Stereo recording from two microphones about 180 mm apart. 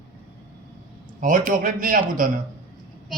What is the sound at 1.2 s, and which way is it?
A man's voice, 50° right (ahead or behind).